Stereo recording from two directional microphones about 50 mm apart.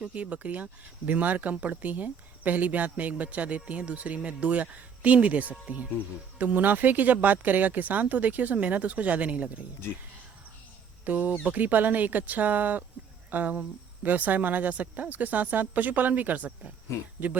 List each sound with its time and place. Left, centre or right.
0.0 s speech: right
11.0 s speech: right